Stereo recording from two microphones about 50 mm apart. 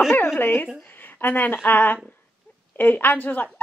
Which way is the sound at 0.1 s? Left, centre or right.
Left.